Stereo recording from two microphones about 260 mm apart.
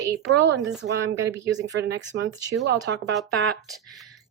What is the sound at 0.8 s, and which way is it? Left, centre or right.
Speech, right.